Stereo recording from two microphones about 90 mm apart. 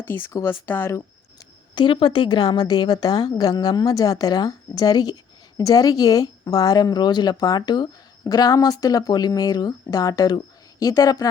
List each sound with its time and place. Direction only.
0.0 s speech: 25° left (ahead or behind)
1.4 s a woman's voice: 60° left (ahead or behind); by 11.3 s 45° left (ahead or behind)